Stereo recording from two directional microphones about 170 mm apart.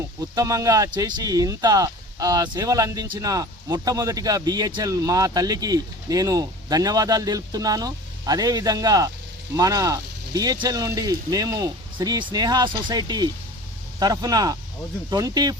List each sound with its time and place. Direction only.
0.2 s speech: 20° right (ahead or behind)